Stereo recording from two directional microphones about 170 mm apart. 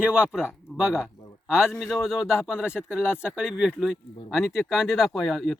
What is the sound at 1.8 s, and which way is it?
Speech, centre (ahead or behind).